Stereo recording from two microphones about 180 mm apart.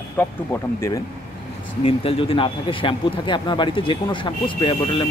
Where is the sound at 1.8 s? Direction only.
30° left (ahead or behind).